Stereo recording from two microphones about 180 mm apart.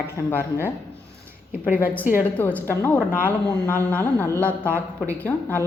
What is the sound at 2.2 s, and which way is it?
Speech, 10° left (ahead or behind).